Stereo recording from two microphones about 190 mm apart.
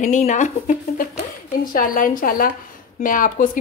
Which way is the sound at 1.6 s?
50° left (ahead or behind).